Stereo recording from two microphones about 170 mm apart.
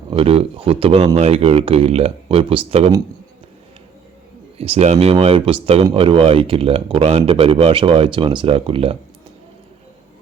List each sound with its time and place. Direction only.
0.1 s speech: 35° right (ahead or behind)
4.5 s speech: 35° right (ahead or behind)